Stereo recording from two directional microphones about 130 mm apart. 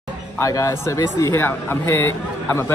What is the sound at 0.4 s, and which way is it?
Speech, 25° left (ahead or behind).